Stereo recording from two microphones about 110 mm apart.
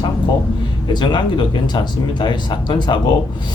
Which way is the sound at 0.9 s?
45° left (ahead or behind).